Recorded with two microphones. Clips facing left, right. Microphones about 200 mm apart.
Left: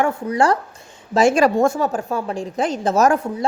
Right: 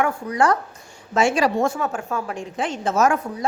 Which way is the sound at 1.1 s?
45° left (ahead or behind).